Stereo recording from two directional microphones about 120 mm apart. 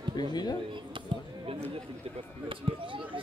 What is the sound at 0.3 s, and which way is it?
Speech, 35° left (ahead or behind).